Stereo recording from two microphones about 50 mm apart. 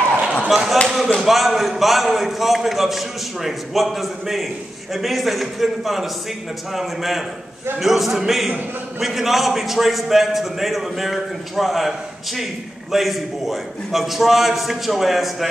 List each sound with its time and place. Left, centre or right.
0.0 s chop: left
0.5 s a sound: centre
0.8 s a man's voice: centre
12.9 s a man's voice: centre